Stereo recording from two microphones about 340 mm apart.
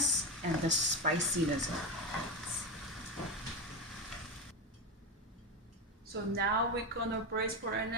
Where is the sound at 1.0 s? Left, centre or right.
Right.